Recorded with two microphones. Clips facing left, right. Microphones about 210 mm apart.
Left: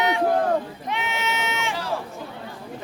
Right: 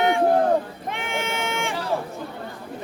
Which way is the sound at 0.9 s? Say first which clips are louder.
Even; 50° right (ahead or behind).